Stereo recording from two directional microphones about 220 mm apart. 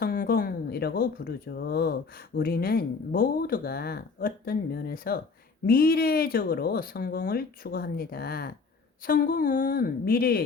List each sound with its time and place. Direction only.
0.0 s speech: 40° left (ahead or behind)